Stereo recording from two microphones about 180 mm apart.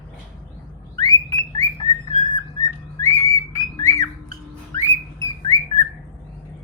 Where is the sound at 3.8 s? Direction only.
20° left (ahead or behind).